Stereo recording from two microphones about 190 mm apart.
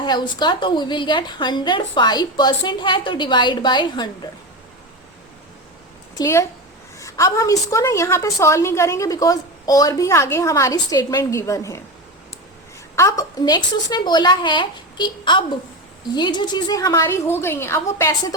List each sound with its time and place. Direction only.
0.0 s a woman's voice: 25° left (ahead or behind)
6.1 s a woman's voice: 15° left (ahead or behind)
13.0 s a woman's voice: 15° left (ahead or behind)